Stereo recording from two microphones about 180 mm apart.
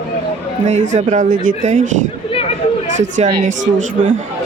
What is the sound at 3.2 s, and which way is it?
Speech, 35° right (ahead or behind).